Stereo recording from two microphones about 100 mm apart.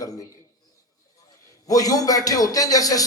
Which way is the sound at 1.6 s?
35° left (ahead or behind).